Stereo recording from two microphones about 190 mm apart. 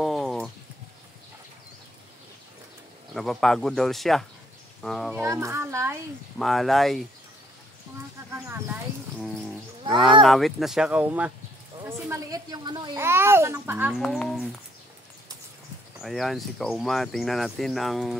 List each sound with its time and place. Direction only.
0.0 s a sound: centre (ahead or behind)
3.2 s speech: centre (ahead or behind)
5.1 s a child's voice: 15° right (ahead or behind)
6.3 s speech: centre (ahead or behind)
8.5 s a child's voice: 10° right (ahead or behind)
10.2 s a child's voice: centre (ahead or behind)
14.0 s speech: centre (ahead or behind)
16.0 s speech: centre (ahead or behind)